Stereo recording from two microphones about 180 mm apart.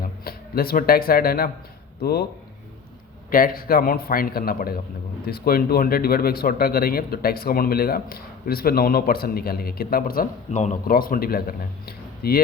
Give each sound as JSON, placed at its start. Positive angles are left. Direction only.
{"t": 0.3, "sound": "speech", "side_deg": 55}
{"t": 3.2, "sound": "speech", "side_deg": 50}